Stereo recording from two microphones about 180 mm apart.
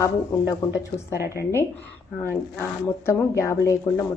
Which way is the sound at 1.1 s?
15° right (ahead or behind).